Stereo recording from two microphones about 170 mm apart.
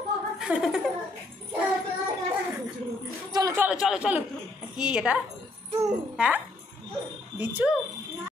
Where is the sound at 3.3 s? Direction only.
20° right (ahead or behind).